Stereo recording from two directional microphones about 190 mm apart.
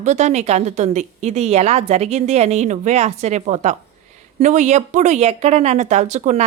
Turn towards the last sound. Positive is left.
turn(degrees=-40)  # may be behind; listen again after turning